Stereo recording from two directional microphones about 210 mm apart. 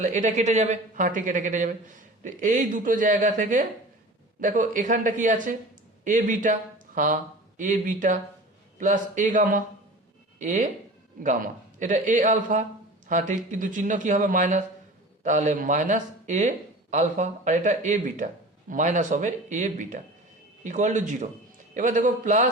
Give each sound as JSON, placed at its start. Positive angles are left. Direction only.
{"t": 0.0, "sound": "speech", "side_deg": -35}